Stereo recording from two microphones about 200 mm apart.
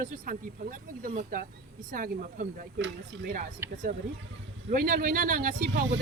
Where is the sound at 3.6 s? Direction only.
10° right (ahead or behind).